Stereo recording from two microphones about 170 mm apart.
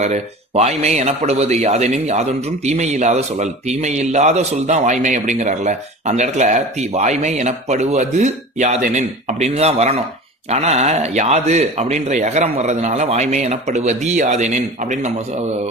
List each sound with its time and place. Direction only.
0.0 s a man's voice: 40° right (ahead or behind)